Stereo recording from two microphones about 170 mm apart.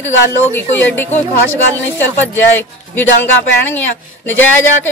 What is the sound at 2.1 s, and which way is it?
A woman's voice, 10° left (ahead or behind).